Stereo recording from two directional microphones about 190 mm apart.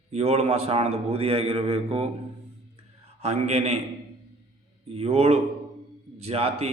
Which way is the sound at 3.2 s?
35° right (ahead or behind).